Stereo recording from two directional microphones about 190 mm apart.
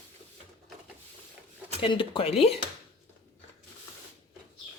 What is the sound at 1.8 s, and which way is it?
Speech, 25° left (ahead or behind).